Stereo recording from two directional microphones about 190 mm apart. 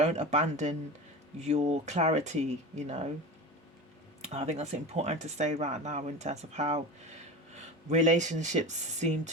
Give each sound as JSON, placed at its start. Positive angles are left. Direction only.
{"t": 0.0, "sound": "speech", "side_deg": -35}
{"t": 4.3, "sound": "speech", "side_deg": -35}